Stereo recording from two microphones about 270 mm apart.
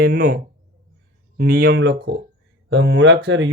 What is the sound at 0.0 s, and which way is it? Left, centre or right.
Speech, right.